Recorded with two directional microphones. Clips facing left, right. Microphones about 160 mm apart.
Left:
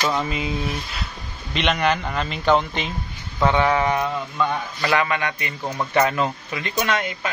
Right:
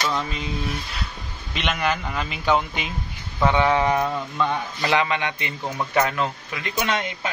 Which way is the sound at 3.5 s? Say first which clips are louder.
Even; 20° right (ahead or behind).